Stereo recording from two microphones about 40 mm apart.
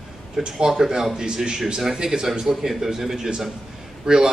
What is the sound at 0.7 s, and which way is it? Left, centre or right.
Speech, centre.